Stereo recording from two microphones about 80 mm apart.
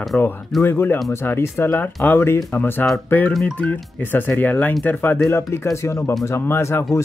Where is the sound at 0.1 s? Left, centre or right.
Centre.